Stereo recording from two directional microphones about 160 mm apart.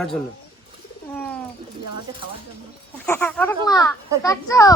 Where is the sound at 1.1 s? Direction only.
10° left (ahead or behind).